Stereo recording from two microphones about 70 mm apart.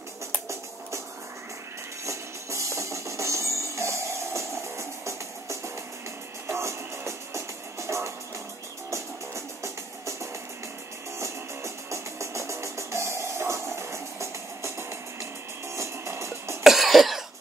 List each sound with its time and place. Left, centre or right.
2.0 s music: right
11.1 s music: right
16.6 s cough: centre